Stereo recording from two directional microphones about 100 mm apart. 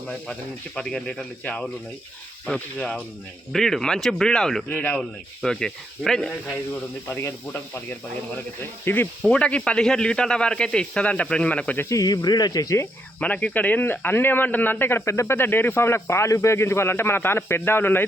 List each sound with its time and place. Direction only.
0.8 s speech: 5° left (ahead or behind)
4.7 s speech: 15° left (ahead or behind)
4.9 s speech: 5° left (ahead or behind)
7.1 s speech: 25° left (ahead or behind)
11.9 s speech: 40° left (ahead or behind)
13.1 s speech: 15° left (ahead or behind)